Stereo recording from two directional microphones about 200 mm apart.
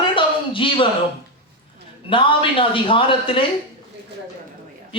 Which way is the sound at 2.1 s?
25° left (ahead or behind).